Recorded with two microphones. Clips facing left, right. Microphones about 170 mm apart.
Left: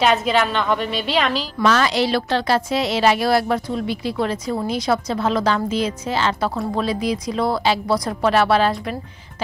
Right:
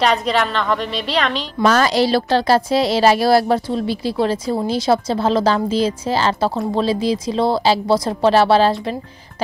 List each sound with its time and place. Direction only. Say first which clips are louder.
0.0 s a woman's voice: even; centre (ahead or behind)
1.6 s a woman's voice: right 3 dB; 40° right (ahead or behind)